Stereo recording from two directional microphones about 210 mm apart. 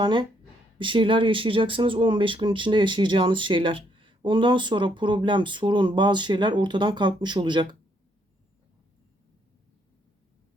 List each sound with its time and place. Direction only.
0.0 s speech: 20° right (ahead or behind)